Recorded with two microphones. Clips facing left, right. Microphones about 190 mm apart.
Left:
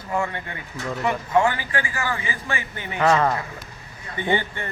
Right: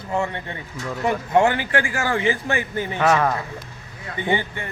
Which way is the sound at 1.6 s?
75° right (ahead or behind).